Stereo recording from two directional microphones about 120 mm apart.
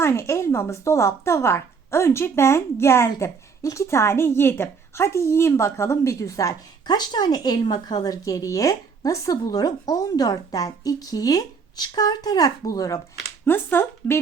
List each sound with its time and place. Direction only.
0.0 s speech: 25° left (ahead or behind)
13.4 s speech: 20° left (ahead or behind)